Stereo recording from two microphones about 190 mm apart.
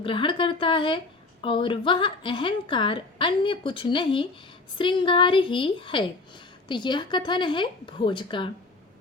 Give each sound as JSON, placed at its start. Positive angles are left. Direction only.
{"t": 0.0, "sound": "a woman's voice", "side_deg": 25}